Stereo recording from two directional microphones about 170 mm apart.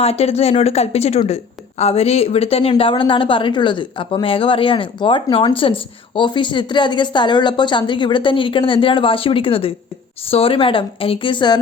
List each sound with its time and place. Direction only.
0.0 s speech: 35° left (ahead or behind)